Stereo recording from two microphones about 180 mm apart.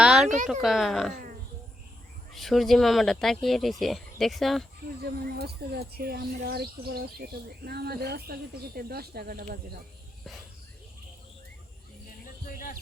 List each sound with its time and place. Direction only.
0.0 s a sound: 5° right (ahead or behind)
0.4 s speech: centre (ahead or behind)
1.1 s speech: 50° right (ahead or behind)
2.3 s speech: centre (ahead or behind)
5.0 s speech: 60° right (ahead or behind)
12.5 s a sound: 50° left (ahead or behind)